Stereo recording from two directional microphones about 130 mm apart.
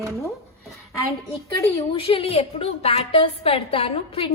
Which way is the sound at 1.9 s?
45° left (ahead or behind).